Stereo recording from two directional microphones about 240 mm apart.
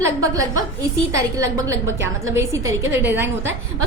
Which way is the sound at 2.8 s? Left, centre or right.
Right.